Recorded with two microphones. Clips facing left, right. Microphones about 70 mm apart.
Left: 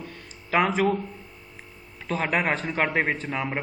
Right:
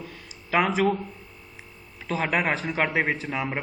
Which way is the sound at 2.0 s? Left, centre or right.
Centre.